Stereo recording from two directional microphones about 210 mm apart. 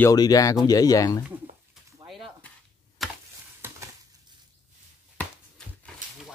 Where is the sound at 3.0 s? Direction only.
Centre (ahead or behind).